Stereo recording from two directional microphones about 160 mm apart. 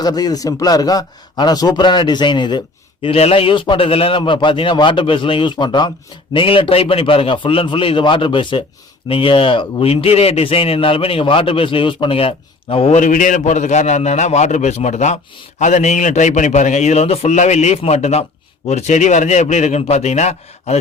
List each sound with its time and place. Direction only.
0.0 s a man's voice: 25° left (ahead or behind)
13.0 s a man's voice: 55° left (ahead or behind)